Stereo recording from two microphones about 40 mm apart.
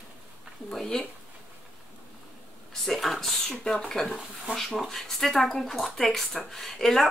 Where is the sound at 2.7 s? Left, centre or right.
Centre.